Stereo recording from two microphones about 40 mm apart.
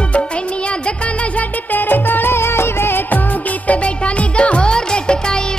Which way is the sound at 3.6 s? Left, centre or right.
Left.